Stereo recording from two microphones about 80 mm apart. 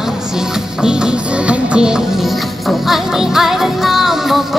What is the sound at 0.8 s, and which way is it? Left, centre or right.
Music, centre.